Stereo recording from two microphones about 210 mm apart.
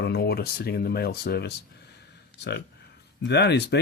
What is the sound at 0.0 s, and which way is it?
Speech, 50° left (ahead or behind).